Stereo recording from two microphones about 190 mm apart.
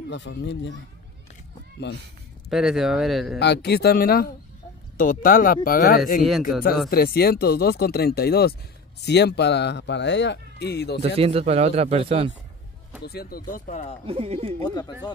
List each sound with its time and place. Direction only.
0.1 s speech: 70° left (ahead or behind)
2.5 s speech: 5° right (ahead or behind)
3.3 s speech: 60° left (ahead or behind)
11.0 s a man's voice: 30° right (ahead or behind)
13.0 s speech: 55° left (ahead or behind)
14.0 s a man's voice: 30° right (ahead or behind)
14.6 s speech: 20° left (ahead or behind)